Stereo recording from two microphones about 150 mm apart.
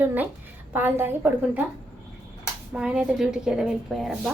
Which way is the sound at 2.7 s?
10° right (ahead or behind).